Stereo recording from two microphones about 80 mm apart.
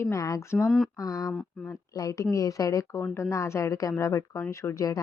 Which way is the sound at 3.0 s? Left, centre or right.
Left.